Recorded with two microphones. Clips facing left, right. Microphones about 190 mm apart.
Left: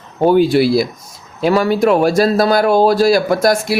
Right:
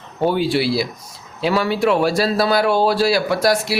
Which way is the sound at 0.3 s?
45° left (ahead or behind).